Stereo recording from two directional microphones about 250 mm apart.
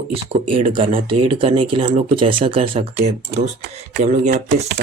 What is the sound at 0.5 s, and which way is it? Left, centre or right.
Speech, right.